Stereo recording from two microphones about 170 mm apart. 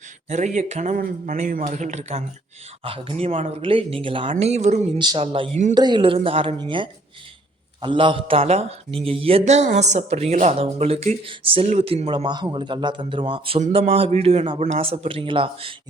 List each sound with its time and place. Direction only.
0.3 s a man's voice: 45° right (ahead or behind)
4.9 s a woman's voice: 25° right (ahead or behind)